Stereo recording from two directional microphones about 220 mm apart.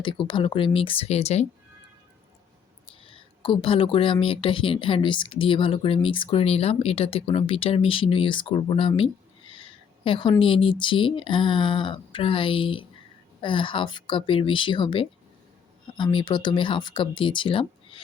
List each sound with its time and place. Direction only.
0.0 s speech: 20° left (ahead or behind)
3.0 s a woman's voice: 25° left (ahead or behind)